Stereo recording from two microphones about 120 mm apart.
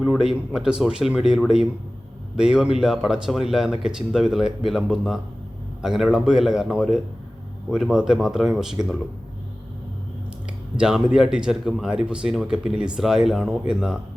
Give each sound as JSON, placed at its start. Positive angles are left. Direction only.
{"t": 0.0, "sound": "speech", "side_deg": -5}
{"t": 10.8, "sound": "speech", "side_deg": -5}